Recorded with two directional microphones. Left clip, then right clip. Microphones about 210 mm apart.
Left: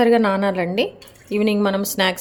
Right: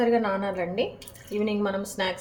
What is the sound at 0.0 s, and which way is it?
A woman's voice, 50° left (ahead or behind).